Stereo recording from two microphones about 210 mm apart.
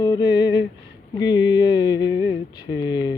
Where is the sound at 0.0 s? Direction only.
20° left (ahead or behind).